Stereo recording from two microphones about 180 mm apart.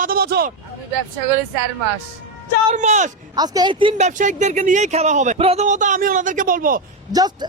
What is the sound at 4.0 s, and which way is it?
Speech, 45° right (ahead or behind).